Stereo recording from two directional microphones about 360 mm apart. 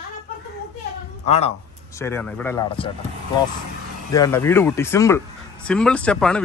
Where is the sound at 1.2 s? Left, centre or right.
Centre.